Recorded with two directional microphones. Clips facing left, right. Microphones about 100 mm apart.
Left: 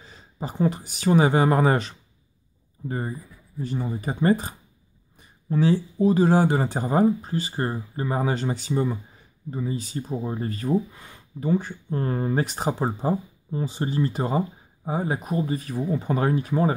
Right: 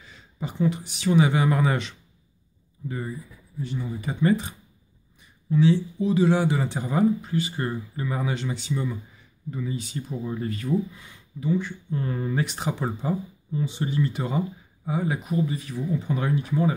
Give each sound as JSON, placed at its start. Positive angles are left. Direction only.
{"t": 0.0, "sound": "speech", "side_deg": 35}